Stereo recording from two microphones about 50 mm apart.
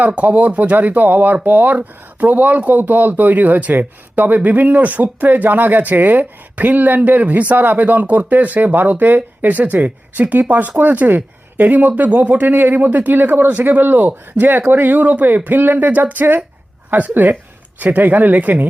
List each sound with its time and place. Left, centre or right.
0.0 s speech: right